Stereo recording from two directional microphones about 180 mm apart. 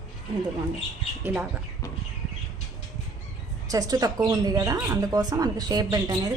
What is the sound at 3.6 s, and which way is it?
Speech, 20° right (ahead or behind).